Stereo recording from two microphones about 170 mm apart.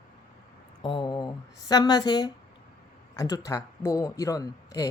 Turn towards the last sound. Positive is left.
turn(degrees=20)  # may be behind; listen again after turning